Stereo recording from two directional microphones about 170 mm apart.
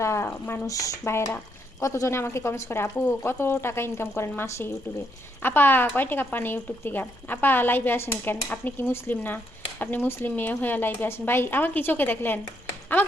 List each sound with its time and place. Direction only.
0.0 s a woman's voice: 15° left (ahead or behind)